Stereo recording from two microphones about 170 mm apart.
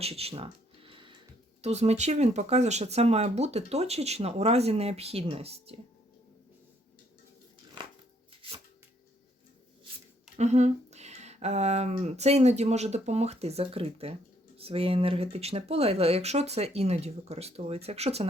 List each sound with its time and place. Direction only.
0.0 s a sound: 35° right (ahead or behind)
1.6 s speech: 40° right (ahead or behind)
10.3 s speech: 40° right (ahead or behind)